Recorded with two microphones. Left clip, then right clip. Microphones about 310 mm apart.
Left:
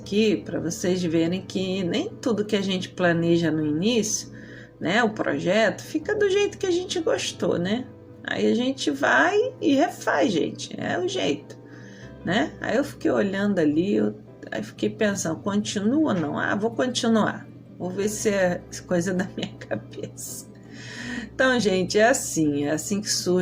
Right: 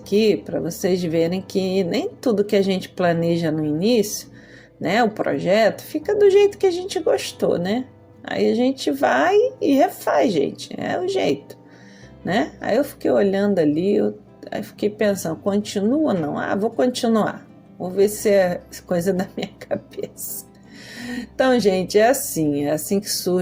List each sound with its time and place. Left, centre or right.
0.1 s speech: centre